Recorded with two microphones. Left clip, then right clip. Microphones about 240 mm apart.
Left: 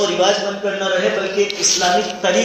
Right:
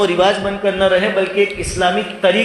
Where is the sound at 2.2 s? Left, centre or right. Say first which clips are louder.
Right 5 dB; right.